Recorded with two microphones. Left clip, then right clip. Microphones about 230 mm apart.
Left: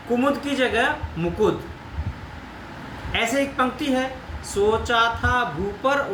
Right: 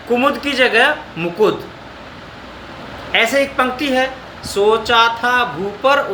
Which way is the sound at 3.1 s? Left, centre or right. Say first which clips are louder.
Right 8 dB; centre.